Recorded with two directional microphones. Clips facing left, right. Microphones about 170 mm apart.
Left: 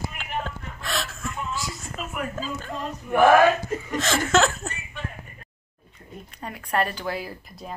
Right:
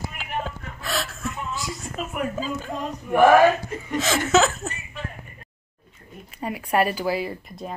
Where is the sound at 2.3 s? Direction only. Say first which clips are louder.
Right 3 dB; 5° right (ahead or behind).